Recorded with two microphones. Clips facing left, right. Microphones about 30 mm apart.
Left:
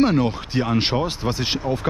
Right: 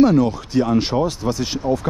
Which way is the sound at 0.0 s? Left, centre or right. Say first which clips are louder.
Right 4 dB; left.